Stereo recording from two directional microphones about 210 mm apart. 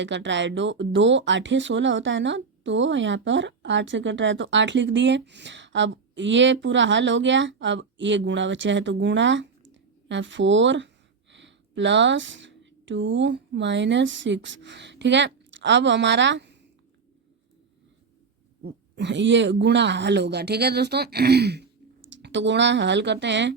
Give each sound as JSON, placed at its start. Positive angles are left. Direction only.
{"t": 0.0, "sound": "speech", "side_deg": -60}
{"t": 18.6, "sound": "speech", "side_deg": -55}